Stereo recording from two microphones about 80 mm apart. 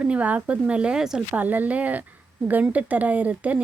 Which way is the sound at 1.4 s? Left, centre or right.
Right.